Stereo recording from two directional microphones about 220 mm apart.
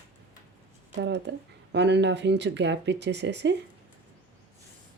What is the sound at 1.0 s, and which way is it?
Speech, 50° right (ahead or behind).